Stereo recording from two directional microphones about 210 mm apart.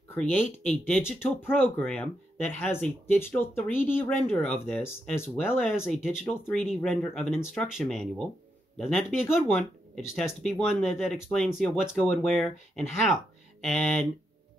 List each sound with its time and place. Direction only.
0.1 s speech: 10° left (ahead or behind)
5.6 s speech: centre (ahead or behind)